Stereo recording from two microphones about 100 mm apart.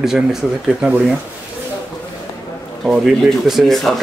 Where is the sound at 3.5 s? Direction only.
Centre (ahead or behind).